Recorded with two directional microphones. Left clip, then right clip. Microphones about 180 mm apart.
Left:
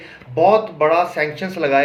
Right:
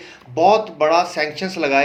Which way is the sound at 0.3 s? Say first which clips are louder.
Left 1 dB; 40° right (ahead or behind).